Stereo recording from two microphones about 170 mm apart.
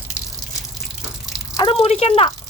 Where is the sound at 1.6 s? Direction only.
35° left (ahead or behind).